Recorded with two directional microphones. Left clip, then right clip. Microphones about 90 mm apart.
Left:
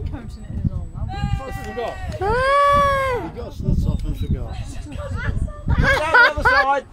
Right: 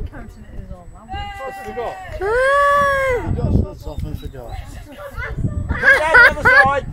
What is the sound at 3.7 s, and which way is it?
Speech, 30° left (ahead or behind).